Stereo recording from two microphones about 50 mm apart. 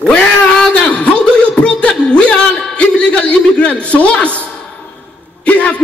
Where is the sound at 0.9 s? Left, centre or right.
Left.